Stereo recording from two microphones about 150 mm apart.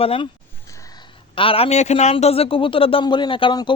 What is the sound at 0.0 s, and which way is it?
Speech, 40° left (ahead or behind).